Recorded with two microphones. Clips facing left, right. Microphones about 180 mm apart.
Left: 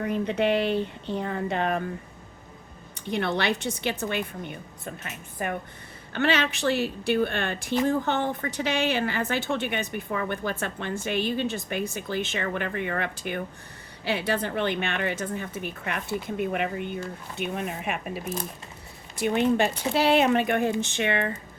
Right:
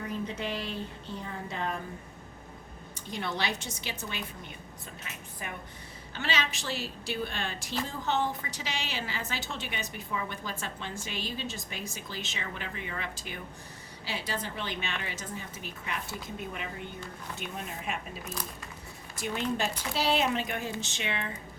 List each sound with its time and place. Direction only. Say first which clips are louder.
0.0 s speech: left 10 dB; 65° left (ahead or behind)
3.1 s speech: left 8 dB; 65° left (ahead or behind)
19.2 s speech: left 9 dB; 65° left (ahead or behind)